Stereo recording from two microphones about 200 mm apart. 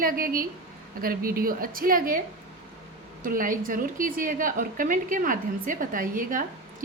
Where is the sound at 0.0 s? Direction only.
45° right (ahead or behind).